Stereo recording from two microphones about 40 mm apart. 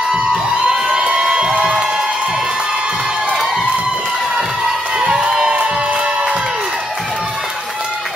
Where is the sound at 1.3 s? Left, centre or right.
Right.